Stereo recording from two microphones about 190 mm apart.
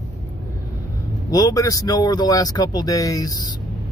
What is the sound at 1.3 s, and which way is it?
Speech, 20° left (ahead or behind).